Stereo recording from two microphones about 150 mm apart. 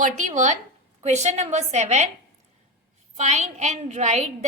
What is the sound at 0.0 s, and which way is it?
A woman's voice, 55° right (ahead or behind).